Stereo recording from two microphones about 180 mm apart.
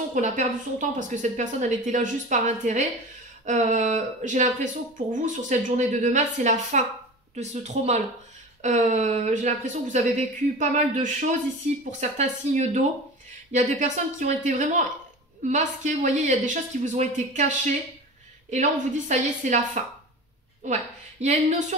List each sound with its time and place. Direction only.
0.1 s speech: 45° right (ahead or behind)